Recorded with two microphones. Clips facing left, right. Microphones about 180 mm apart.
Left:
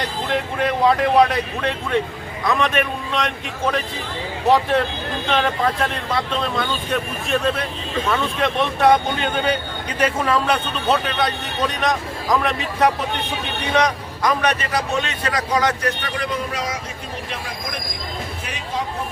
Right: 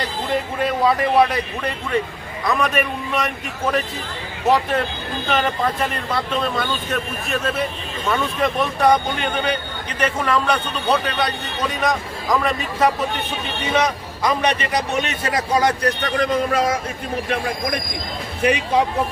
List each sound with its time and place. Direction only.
0.3 s a man's voice: centre (ahead or behind)
14.7 s a man's voice: 20° right (ahead or behind)
16.1 s speech: 45° right (ahead or behind); by 18.8 s 70° right (ahead or behind)